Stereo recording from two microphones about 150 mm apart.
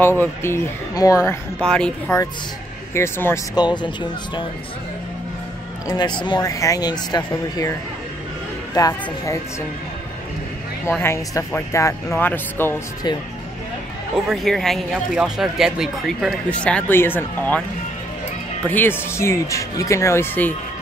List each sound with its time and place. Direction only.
0.2 s speech: 15° left (ahead or behind)
1.6 s speech: 5° left (ahead or behind)
3.5 s speech: 30° left (ahead or behind)
5.9 s speech: 30° left (ahead or behind)
8.7 s speech: 20° left (ahead or behind)
10.9 s speech: 15° left (ahead or behind)
14.3 s speech: centre (ahead or behind)
16.4 s speech: 10° left (ahead or behind)
18.7 s speech: 15° left (ahead or behind)